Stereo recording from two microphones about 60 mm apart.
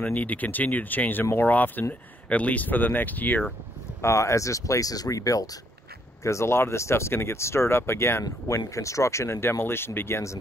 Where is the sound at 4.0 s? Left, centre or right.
Left.